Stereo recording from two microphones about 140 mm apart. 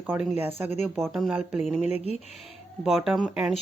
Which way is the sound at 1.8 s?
50° left (ahead or behind).